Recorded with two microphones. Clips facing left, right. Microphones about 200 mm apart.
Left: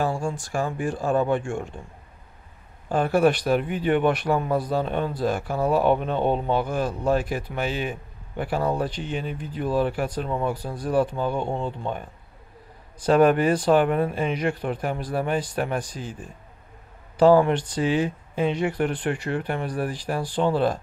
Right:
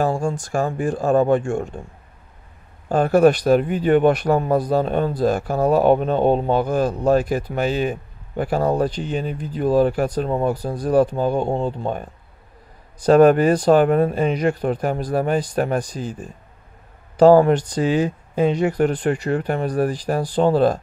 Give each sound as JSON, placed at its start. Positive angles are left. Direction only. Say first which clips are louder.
{"t": 0.0, "sound": "speech", "louder": "right 5 dB", "side_deg": -45}
{"t": 2.9, "sound": "a man's voice", "louder": "right 5 dB", "side_deg": -45}
{"t": 13.0, "sound": "a man's voice", "louder": "right 5 dB", "side_deg": -40}
{"t": 17.2, "sound": "a man's voice", "louder": "right 5 dB", "side_deg": -40}